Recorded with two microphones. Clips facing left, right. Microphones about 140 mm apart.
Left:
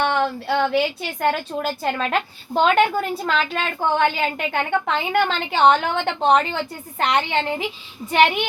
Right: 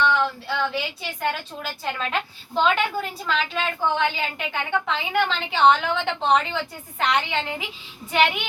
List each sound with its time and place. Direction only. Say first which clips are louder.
0.0 s a woman's voice: left 2 dB; 55° left (ahead or behind); by 8.4 s 40° left (ahead or behind)